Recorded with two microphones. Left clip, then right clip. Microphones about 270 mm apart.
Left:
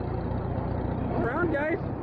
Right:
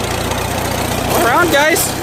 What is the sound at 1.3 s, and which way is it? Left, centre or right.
Speech, centre.